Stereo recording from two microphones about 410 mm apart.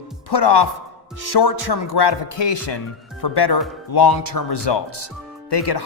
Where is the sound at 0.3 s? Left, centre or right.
Left.